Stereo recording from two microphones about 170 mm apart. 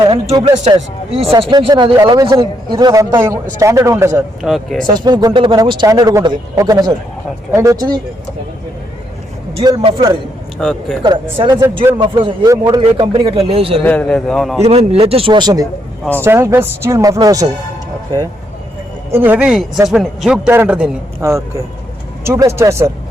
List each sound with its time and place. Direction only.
0.3 s speech: 25° right (ahead or behind)
4.4 s a man's voice: centre (ahead or behind)
4.9 s speech: 25° right (ahead or behind)
10.6 s a man's voice: centre (ahead or behind)
11.0 s speech: 25° right (ahead or behind)
12.2 s speech: 25° right (ahead or behind)
13.8 s a man's voice: 5° left (ahead or behind)
14.6 s speech: 35° right (ahead or behind)
16.2 s speech: 15° right (ahead or behind)
19.1 s a man's voice: 10° right (ahead or behind)